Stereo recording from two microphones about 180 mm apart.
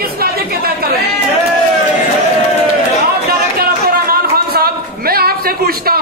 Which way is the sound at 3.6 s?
60° right (ahead or behind).